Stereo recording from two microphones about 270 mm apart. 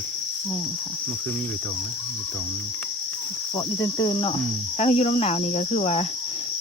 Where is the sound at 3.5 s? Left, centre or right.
Centre.